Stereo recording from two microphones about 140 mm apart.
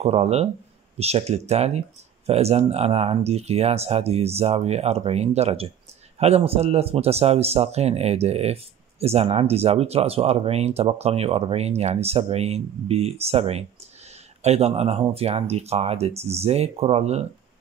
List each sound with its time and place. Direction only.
0.0 s speech: 45° right (ahead or behind)